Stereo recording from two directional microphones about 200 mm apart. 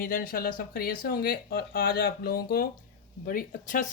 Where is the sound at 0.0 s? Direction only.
45° left (ahead or behind).